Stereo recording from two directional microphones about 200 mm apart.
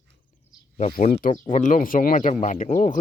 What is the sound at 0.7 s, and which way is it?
Speech, 40° left (ahead or behind).